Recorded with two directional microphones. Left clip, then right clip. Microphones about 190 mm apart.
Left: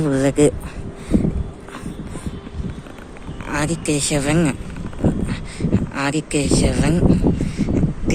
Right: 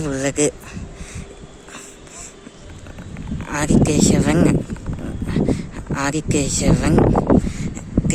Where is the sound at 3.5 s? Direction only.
15° right (ahead or behind).